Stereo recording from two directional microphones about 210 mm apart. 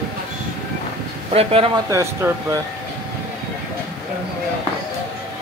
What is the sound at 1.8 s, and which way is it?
Speech, 15° right (ahead or behind).